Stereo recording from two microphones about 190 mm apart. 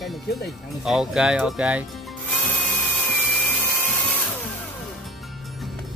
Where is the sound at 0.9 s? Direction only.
5° right (ahead or behind).